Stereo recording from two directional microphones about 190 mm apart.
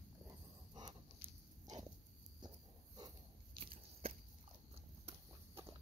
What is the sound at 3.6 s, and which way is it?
Biting, 30° right (ahead or behind).